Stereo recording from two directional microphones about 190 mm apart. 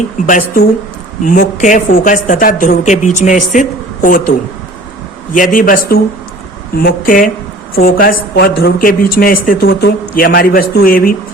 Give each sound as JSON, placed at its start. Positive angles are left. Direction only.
{"t": 0.3, "sound": "speech", "side_deg": 45}
{"t": 5.3, "sound": "speech", "side_deg": 45}